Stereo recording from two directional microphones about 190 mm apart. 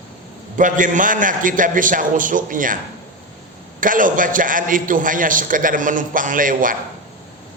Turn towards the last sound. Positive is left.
turn(degrees=-45)  # may be behind; listen again after turning